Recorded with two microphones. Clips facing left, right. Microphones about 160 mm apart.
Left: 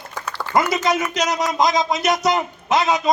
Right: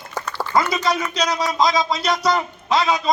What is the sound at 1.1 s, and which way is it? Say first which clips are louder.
Speech: left 1 dB; 20° left (ahead or behind).